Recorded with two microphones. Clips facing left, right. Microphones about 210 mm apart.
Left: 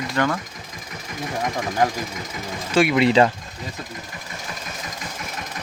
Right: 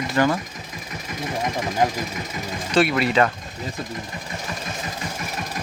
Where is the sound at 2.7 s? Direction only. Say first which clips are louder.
Left 1 dB; 10° left (ahead or behind).